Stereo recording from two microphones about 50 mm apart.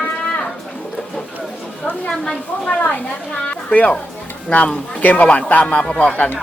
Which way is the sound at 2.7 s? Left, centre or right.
Left.